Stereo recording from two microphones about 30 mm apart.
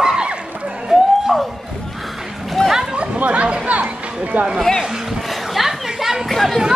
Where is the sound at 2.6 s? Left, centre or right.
Left.